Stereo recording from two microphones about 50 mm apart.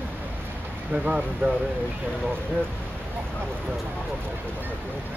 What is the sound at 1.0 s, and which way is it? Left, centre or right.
Speech, right.